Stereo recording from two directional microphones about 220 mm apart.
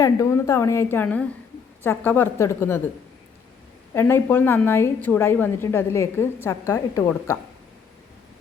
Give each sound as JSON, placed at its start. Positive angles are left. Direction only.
{"t": 0.0, "sound": "a woman's voice", "side_deg": 15}
{"t": 3.9, "sound": "a woman's voice", "side_deg": 10}